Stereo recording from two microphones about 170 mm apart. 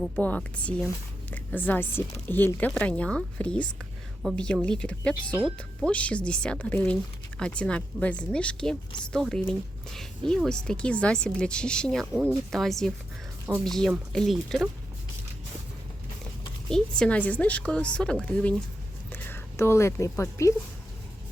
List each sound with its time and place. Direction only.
0.2 s a woman's voice: 10° left (ahead or behind)
16.6 s a woman's voice: 5° left (ahead or behind)